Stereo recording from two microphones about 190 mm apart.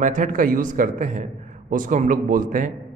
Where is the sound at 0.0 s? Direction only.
45° right (ahead or behind).